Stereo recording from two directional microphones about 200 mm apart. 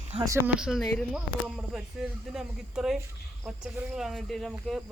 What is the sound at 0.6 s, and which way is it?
Speech, centre (ahead or behind).